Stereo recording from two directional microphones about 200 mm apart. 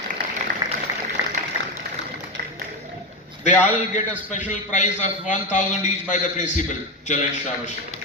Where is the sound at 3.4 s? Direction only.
35° left (ahead or behind).